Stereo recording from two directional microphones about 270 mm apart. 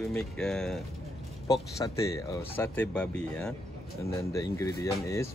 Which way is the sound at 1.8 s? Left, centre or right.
Centre.